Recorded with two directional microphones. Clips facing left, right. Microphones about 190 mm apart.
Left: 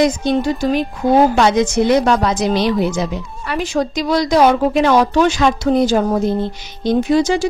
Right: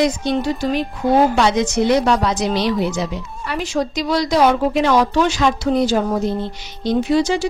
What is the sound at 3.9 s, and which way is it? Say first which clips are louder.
A woman's voice: left 3 dB; 50° left (ahead or behind).